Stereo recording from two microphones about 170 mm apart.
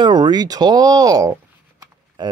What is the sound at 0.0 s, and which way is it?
Speech, 25° right (ahead or behind).